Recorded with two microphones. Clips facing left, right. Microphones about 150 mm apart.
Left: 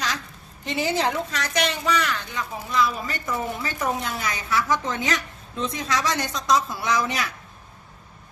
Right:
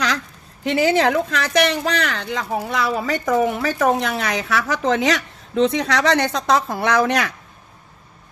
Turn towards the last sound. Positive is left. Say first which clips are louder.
# right 7 dB
turn(degrees=-65)  # may be behind; listen again after turning